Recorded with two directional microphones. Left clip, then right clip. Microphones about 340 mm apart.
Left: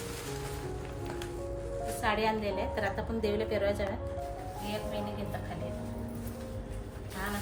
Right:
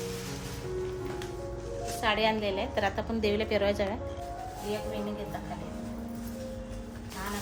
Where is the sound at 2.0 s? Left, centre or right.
Centre.